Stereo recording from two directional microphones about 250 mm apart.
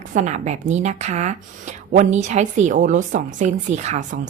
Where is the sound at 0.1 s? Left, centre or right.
Right.